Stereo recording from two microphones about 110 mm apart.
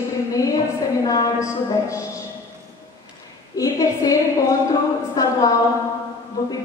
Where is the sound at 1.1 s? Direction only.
30° left (ahead or behind).